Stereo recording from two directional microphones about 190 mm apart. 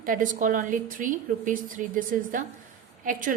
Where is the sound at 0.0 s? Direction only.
45° right (ahead or behind).